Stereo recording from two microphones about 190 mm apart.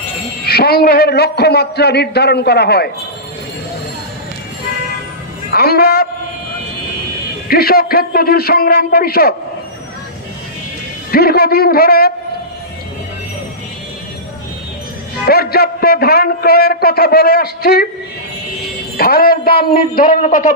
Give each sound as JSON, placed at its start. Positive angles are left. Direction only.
{"t": 0.5, "sound": "a man's voice", "side_deg": 55}
{"t": 5.5, "sound": "a man's voice", "side_deg": 55}
{"t": 7.4, "sound": "a man's voice", "side_deg": 55}
{"t": 11.1, "sound": "a man's voice", "side_deg": 55}
{"t": 15.2, "sound": "a man's voice", "side_deg": 55}
{"t": 18.9, "sound": "a man's voice", "side_deg": 55}